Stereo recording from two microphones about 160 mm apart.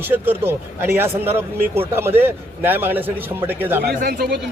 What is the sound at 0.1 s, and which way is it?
A man's voice, 15° right (ahead or behind).